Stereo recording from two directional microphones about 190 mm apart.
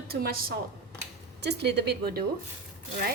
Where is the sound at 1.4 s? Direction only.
60° right (ahead or behind).